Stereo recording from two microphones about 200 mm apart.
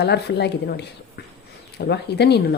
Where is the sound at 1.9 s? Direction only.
55° left (ahead or behind).